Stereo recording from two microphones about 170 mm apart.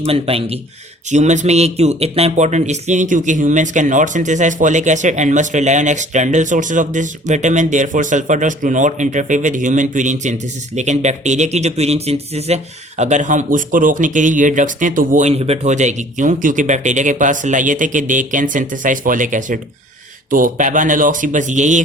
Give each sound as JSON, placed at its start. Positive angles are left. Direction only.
{"t": 0.0, "sound": "speech", "side_deg": -35}